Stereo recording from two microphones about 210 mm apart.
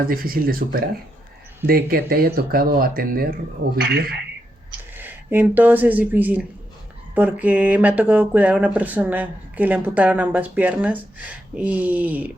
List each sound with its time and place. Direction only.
0.0 s speech: 45° right (ahead or behind)
4.9 s speech: 10° right (ahead or behind)